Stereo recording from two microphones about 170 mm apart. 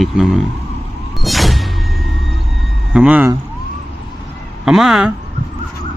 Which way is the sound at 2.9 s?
5° right (ahead or behind).